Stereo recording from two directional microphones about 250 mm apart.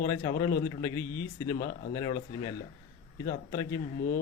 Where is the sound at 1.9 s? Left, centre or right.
Centre.